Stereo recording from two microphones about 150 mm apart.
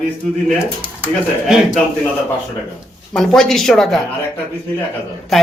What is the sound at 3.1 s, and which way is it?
Speech, centre (ahead or behind).